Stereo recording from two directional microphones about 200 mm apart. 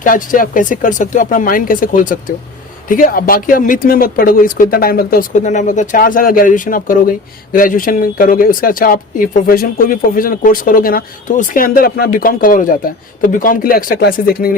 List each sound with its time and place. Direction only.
0.0 s speech: 45° left (ahead or behind)